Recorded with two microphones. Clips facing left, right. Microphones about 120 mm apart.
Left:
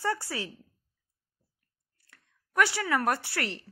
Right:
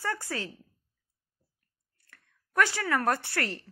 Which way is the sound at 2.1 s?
15° left (ahead or behind).